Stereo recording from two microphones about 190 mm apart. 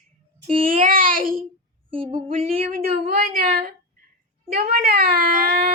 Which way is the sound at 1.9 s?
30° right (ahead or behind).